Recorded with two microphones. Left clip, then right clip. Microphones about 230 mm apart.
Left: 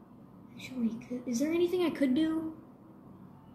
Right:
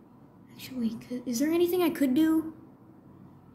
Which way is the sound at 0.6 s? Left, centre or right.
Right.